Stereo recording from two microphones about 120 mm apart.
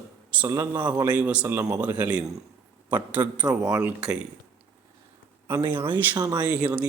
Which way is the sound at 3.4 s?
5° right (ahead or behind).